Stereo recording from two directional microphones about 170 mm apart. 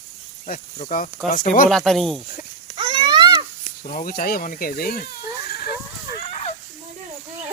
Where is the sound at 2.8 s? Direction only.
30° right (ahead or behind).